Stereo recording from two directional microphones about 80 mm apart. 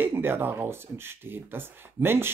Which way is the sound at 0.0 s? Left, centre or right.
Right.